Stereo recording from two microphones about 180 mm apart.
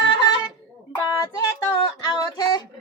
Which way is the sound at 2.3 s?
20° left (ahead or behind).